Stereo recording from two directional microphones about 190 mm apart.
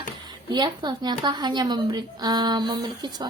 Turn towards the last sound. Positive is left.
turn(degrees=-20)  # may be behind; listen again after turning